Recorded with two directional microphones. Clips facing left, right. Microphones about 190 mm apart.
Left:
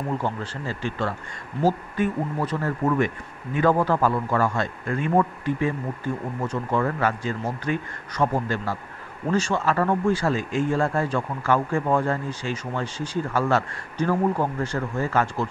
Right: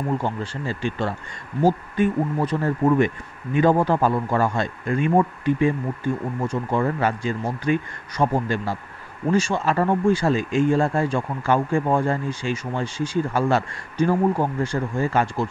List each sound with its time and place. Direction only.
0.2 s a man's voice: 20° right (ahead or behind)
6.8 s speech: 20° right (ahead or behind)